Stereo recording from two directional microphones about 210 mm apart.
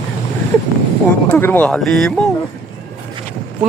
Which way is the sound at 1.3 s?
10° left (ahead or behind).